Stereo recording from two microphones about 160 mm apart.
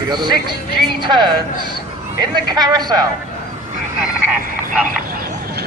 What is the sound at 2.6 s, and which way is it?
Speech, 25° right (ahead or behind).